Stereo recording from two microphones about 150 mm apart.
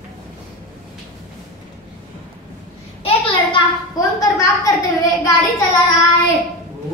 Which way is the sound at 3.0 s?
40° left (ahead or behind).